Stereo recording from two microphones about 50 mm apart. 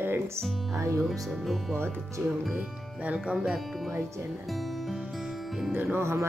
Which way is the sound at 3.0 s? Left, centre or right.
Right.